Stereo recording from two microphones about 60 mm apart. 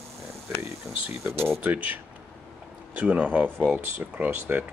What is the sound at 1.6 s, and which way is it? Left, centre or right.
Speech, right.